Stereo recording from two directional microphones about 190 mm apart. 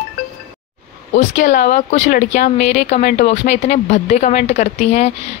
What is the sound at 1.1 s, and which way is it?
Speech, 45° left (ahead or behind).